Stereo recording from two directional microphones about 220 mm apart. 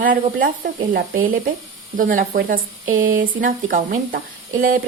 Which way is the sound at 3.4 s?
40° right (ahead or behind).